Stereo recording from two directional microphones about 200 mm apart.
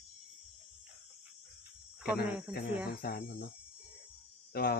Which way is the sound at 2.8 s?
50° left (ahead or behind).